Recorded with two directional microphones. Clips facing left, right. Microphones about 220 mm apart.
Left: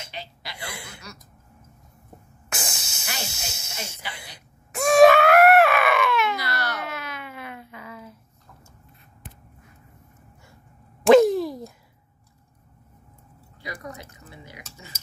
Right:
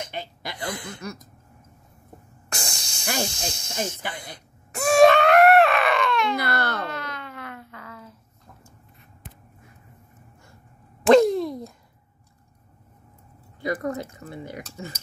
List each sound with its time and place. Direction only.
0.1 s chuckle: 50° right (ahead or behind)
0.7 s a sound: 10° left (ahead or behind)
2.5 s hiss: 5° left (ahead or behind)
3.3 s snake: 5° left (ahead or behind)
4.0 s speech: 50° right (ahead or behind)
4.7 s groan: centre (ahead or behind)
6.3 s baby cry: 55° right (ahead or behind)
6.9 s a sound: 5° left (ahead or behind)
11.1 s a sound: centre (ahead or behind)
13.6 s speech: 50° right (ahead or behind)